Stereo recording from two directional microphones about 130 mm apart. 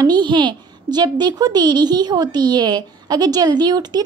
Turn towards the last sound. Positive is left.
turn(degrees=-30)  # may be behind; listen again after turning